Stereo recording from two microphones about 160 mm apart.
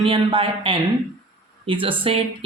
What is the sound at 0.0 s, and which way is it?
Speech, 35° right (ahead or behind).